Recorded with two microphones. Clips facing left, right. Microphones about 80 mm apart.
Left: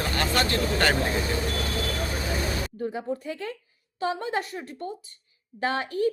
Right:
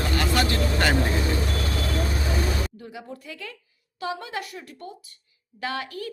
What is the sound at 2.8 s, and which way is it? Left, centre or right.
Speech, left.